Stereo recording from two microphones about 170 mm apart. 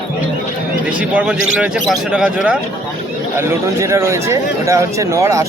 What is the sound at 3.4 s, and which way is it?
Speech, 15° right (ahead or behind).